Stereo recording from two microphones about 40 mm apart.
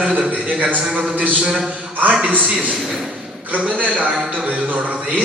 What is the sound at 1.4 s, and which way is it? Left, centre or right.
Speech, centre.